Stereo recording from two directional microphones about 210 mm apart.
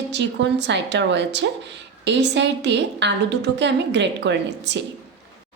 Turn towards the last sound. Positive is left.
turn(degrees=-60)  # may be behind; listen again after turning